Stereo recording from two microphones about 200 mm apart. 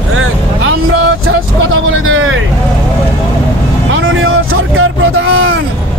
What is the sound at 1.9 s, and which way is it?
Vehicle, 75° right (ahead or behind).